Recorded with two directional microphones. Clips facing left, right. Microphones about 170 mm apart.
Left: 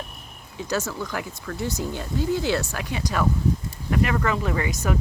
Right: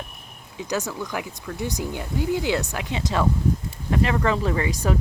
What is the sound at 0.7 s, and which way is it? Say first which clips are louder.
Speech: even; 15° right (ahead or behind).